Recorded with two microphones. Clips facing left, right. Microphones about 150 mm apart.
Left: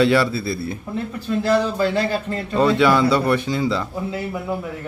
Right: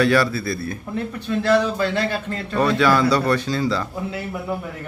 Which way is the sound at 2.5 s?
20° left (ahead or behind).